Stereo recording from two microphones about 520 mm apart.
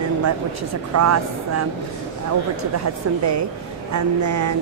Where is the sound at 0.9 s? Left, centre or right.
Right.